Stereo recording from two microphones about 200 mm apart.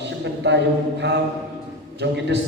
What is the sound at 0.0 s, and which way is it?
A man's voice, 60° right (ahead or behind).